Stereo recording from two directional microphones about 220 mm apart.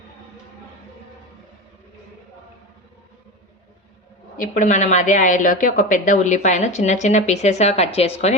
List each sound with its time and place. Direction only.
4.4 s a woman's voice: 35° left (ahead or behind)